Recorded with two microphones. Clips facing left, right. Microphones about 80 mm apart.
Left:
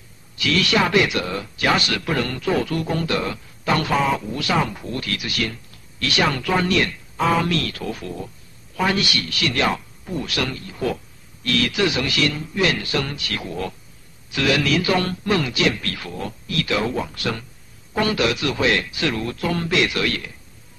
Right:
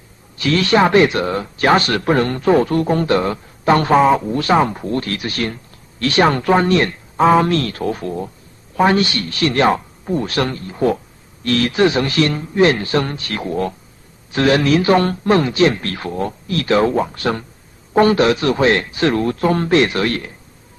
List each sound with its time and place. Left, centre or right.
0.4 s speech: right